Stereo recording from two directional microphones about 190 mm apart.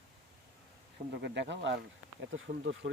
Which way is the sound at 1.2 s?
65° right (ahead or behind).